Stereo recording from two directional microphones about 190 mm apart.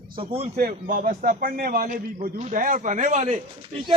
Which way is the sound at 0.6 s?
50° right (ahead or behind).